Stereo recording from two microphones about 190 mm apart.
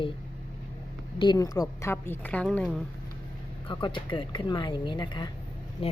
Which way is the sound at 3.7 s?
25° left (ahead or behind).